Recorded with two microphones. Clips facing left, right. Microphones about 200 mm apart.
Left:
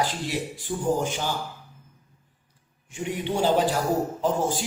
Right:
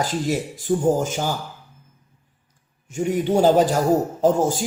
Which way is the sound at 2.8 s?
45° right (ahead or behind).